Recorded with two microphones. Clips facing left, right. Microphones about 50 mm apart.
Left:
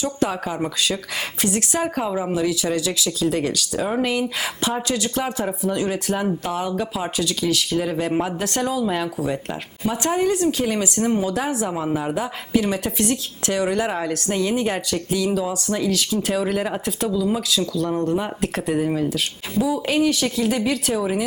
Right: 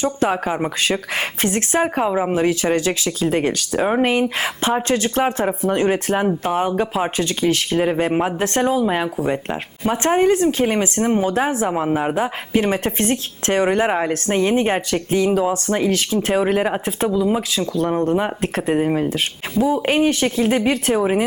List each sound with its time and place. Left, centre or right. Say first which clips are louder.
0.0 s speech: right 4 dB; right